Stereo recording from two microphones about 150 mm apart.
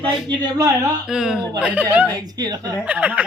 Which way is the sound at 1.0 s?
5° right (ahead or behind).